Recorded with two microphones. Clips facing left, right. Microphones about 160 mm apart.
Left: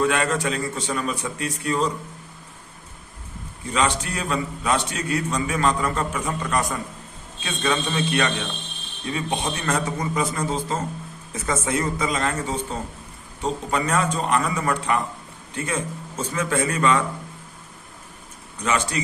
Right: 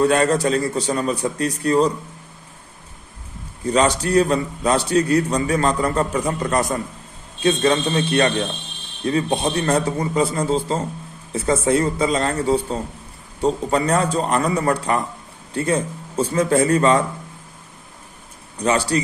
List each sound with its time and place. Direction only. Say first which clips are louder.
0.0 s a man's voice: right 5 dB; 35° right (ahead or behind)
3.7 s a man's voice: right 6 dB; 40° right (ahead or behind)
18.6 s a man's voice: right 5 dB; 35° right (ahead or behind)